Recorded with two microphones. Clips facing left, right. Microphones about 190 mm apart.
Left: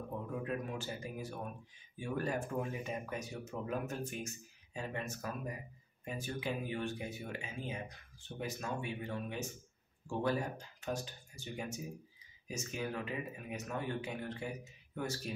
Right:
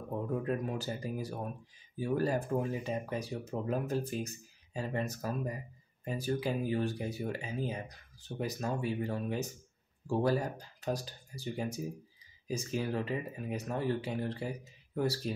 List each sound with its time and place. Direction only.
0.4 s speech: 40° right (ahead or behind)